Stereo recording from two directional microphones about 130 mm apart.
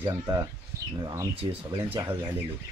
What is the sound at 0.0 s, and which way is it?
Speech, 30° right (ahead or behind).